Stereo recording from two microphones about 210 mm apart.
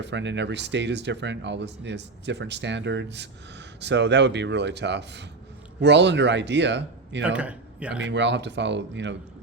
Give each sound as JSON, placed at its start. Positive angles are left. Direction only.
{"t": 0.0, "sound": "speech", "side_deg": -60}
{"t": 7.3, "sound": "speech", "side_deg": -5}
{"t": 8.0, "sound": "speech", "side_deg": -55}